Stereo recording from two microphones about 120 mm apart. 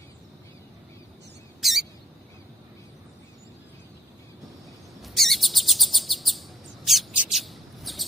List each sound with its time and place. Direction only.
1.6 s a sound: centre (ahead or behind)
5.0 s chirp: centre (ahead or behind)
6.8 s bird: centre (ahead or behind)